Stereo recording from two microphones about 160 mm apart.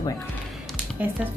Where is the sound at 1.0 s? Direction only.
10° right (ahead or behind).